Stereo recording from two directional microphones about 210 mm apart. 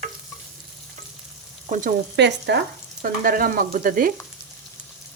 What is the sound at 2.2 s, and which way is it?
Speech, 55° right (ahead or behind).